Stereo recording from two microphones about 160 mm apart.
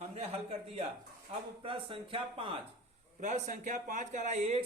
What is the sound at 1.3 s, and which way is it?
Speech, 45° right (ahead or behind).